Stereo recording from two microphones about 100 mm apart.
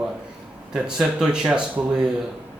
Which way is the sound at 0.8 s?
5° right (ahead or behind).